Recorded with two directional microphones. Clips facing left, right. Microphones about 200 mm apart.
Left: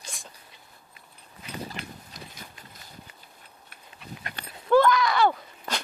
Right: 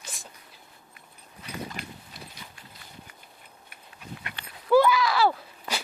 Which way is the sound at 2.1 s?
40° left (ahead or behind).